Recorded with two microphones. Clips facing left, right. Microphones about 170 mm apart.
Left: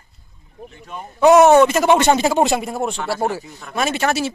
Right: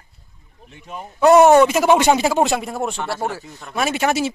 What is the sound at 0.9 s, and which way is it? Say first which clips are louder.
Speech: left 1 dB; 5° left (ahead or behind).